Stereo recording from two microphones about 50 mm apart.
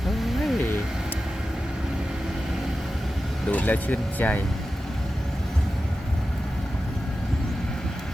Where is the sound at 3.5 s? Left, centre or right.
Left.